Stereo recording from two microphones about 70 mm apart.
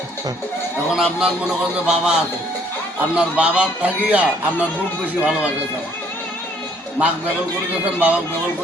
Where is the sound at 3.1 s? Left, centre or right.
Centre.